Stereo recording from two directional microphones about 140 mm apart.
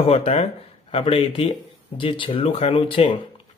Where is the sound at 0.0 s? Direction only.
45° left (ahead or behind).